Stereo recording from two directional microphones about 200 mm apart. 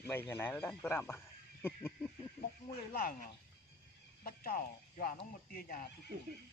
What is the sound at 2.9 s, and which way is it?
Speech, 45° left (ahead or behind).